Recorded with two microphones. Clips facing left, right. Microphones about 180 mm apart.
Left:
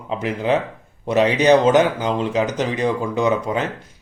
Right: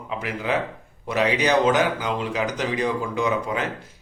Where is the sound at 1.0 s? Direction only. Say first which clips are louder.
Left 7 dB; 30° left (ahead or behind).